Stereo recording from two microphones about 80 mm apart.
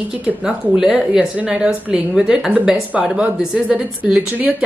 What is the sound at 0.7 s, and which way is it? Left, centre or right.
Speech, centre.